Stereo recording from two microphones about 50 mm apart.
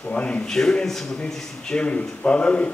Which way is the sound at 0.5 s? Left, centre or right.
Centre.